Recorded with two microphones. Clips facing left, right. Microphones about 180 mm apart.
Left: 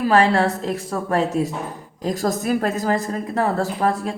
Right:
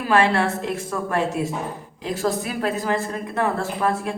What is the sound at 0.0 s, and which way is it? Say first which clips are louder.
A woman's voice: left 3 dB; 35° left (ahead or behind).